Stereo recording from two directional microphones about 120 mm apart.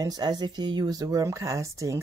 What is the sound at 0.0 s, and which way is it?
Speech, 35° right (ahead or behind).